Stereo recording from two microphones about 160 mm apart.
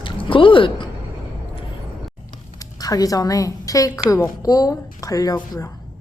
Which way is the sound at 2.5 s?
20° left (ahead or behind).